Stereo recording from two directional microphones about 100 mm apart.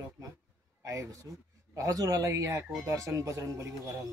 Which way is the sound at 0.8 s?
35° right (ahead or behind).